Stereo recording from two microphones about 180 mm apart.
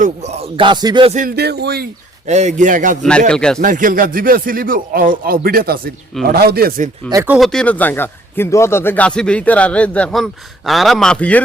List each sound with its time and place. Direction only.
0.0 s speech: 40° right (ahead or behind)
1.4 s a man's voice: 65° right (ahead or behind)
2.2 s speech: 40° right (ahead or behind)
3.0 s a man's voice: 5° left (ahead or behind)
3.6 s a man's voice: 50° right (ahead or behind)
7.1 s speech: 15° right (ahead or behind)
7.3 s a man's voice: centre (ahead or behind)